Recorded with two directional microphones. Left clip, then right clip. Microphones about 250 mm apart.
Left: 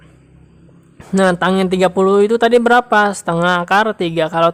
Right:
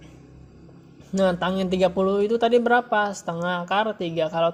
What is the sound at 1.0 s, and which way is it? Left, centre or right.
A woman's voice, left.